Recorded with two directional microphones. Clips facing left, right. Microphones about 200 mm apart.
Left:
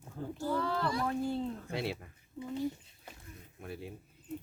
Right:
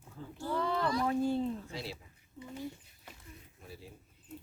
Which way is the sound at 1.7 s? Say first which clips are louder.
Left 6 dB; 60° left (ahead or behind).